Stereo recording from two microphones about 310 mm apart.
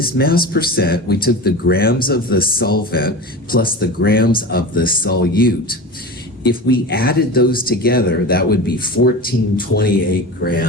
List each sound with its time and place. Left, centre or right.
0.0 s speech: left